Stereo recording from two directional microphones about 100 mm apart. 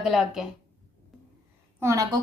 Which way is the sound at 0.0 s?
5° right (ahead or behind).